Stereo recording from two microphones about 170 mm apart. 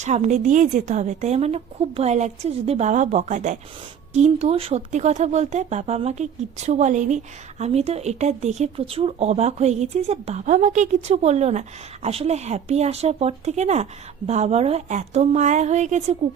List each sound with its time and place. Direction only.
0.0 s a woman's voice: 45° right (ahead or behind)